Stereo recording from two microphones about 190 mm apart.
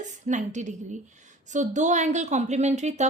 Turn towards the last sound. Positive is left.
turn(degrees=-35)  # may be behind; listen again after turning